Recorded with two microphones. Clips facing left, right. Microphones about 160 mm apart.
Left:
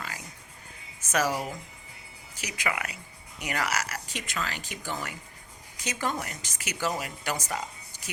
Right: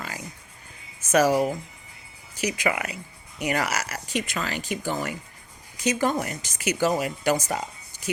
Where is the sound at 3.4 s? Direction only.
40° right (ahead or behind).